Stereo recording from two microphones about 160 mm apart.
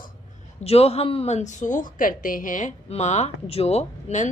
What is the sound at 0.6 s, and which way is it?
A woman's voice, 40° left (ahead or behind).